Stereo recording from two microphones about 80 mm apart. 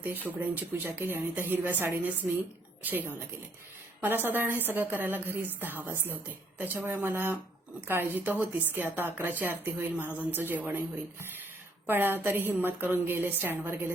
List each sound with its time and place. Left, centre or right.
0.0 s speech: right